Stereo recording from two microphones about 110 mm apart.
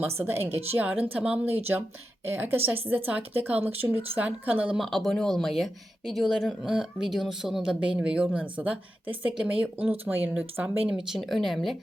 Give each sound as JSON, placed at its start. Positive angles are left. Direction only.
{"t": 0.2, "sound": "a woman's voice", "side_deg": -20}
{"t": 4.8, "sound": "speech", "side_deg": 0}